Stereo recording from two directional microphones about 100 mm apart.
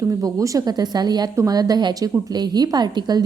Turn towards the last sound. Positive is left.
turn(degrees=-45)  # may be behind; listen again after turning